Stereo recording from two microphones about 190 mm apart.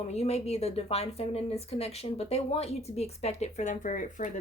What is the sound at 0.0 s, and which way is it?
A woman's voice, 35° left (ahead or behind).